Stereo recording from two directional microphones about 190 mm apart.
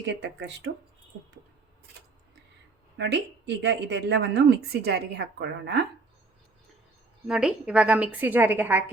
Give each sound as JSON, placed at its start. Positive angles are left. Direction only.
{"t": 0.0, "sound": "speech", "side_deg": -70}
{"t": 3.0, "sound": "a woman's voice", "side_deg": -65}
{"t": 7.3, "sound": "a woman's voice", "side_deg": -5}